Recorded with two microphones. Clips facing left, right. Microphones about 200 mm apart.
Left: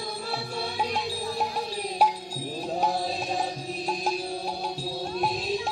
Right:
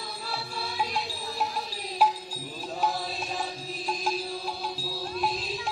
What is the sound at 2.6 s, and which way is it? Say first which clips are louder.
Mantra: left 2 dB; 45° left (ahead or behind).